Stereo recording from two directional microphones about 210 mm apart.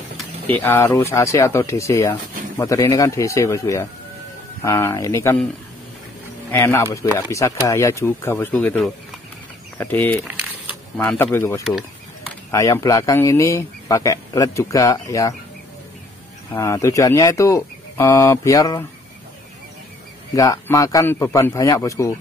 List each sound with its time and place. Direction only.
0.2 s speech: 10° left (ahead or behind)
6.5 s speech: 10° left (ahead or behind)
16.5 s speech: 15° left (ahead or behind)
20.3 s speech: 15° left (ahead or behind)